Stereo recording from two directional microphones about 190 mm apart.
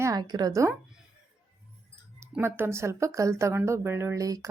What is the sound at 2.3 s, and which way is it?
Speech, 10° right (ahead or behind).